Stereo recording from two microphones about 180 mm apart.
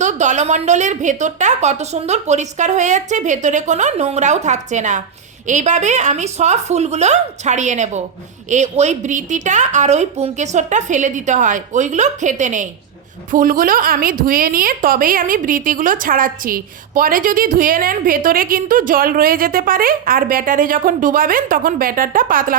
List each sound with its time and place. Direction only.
0.0 s a woman's voice: 40° right (ahead or behind)